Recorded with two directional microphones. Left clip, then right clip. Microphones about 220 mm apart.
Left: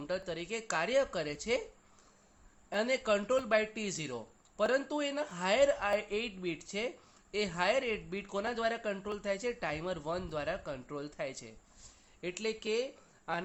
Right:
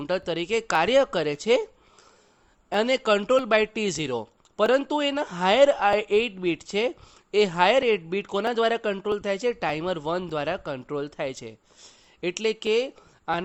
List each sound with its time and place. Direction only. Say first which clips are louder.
0.0 s a man's voice: right 10 dB; 50° right (ahead or behind)
2.6 s a man's voice: right 9 dB; 50° right (ahead or behind)